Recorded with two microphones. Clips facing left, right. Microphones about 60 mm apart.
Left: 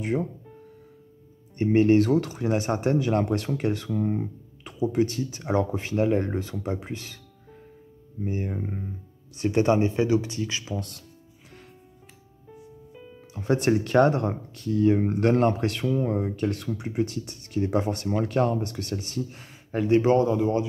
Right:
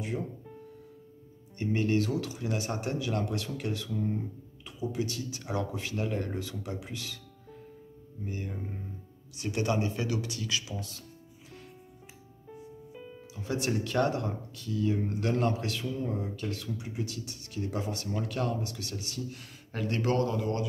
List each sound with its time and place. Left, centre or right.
0.0 s speech: left
1.6 s speech: left
12.4 s music: centre
13.3 s speech: left
16.2 s speech: left
19.3 s speech: left